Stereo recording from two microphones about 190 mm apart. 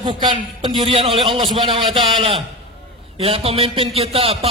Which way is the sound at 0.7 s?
30° right (ahead or behind).